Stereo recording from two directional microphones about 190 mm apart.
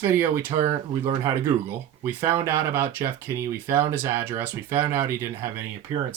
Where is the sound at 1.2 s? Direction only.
15° right (ahead or behind).